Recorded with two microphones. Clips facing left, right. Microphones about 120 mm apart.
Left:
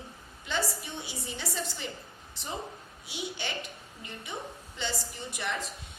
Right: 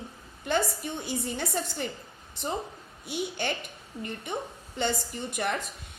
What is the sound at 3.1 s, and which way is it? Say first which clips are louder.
A woman's voice: right 6 dB; 50° right (ahead or behind).